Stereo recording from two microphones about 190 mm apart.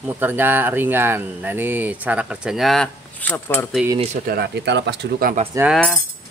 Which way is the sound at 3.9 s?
35° right (ahead or behind).